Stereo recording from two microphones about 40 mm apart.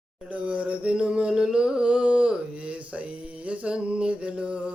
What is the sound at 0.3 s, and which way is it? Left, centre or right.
Mantra, right.